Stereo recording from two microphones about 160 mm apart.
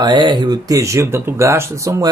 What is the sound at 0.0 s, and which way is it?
A woman's voice, 25° right (ahead or behind).